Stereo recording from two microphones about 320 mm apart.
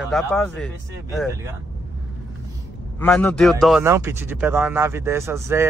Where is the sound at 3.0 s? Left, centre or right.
Centre.